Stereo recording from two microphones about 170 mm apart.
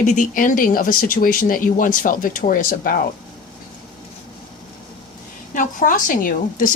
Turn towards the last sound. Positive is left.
turn(degrees=55)  # may be behind; listen again after turning